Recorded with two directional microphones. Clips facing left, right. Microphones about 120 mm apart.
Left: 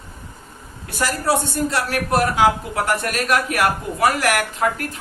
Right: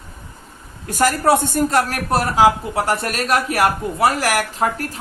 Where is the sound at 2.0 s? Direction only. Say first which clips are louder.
Even; 35° right (ahead or behind).